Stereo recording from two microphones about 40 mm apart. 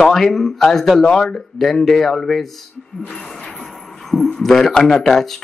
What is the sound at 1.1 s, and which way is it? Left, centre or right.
Speech, centre.